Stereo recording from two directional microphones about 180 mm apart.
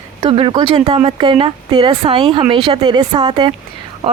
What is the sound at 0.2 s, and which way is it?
Speech, 30° right (ahead or behind).